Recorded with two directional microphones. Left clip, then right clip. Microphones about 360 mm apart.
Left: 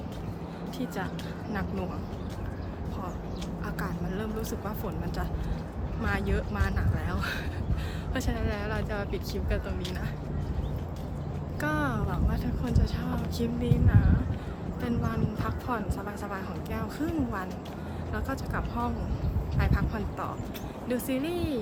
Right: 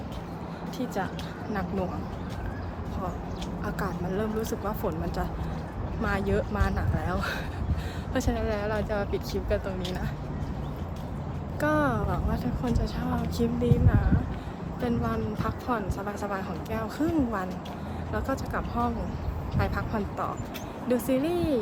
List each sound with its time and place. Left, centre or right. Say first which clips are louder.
3.8 s a woman's voice: right 5 dB; centre
11.6 s a woman's voice: right 5 dB; centre